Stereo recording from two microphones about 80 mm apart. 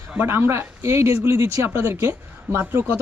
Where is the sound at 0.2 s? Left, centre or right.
Right.